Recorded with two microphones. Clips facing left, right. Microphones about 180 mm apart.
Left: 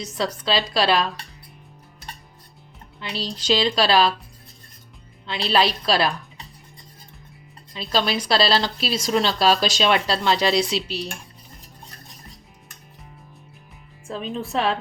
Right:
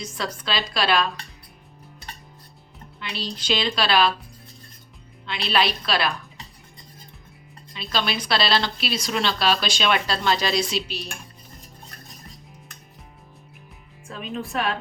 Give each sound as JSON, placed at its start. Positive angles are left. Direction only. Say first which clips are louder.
{"t": 0.2, "sound": "a woman's voice", "louder": "left 5 dB", "side_deg": 35}
{"t": 3.0, "sound": "a woman's voice", "louder": "left 2 dB", "side_deg": 35}
{"t": 5.2, "sound": "a woman's voice", "louder": "left 3 dB", "side_deg": 35}
{"t": 7.7, "sound": "a woman's voice", "louder": "left 4 dB", "side_deg": 35}
{"t": 14.1, "sound": "a woman's voice", "louder": "left 3 dB", "side_deg": 35}